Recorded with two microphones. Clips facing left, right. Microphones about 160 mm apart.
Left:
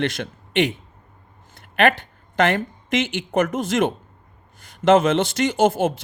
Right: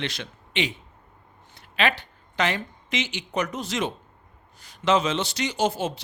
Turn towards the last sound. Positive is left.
turn(degrees=50)  # may be behind; listen again after turning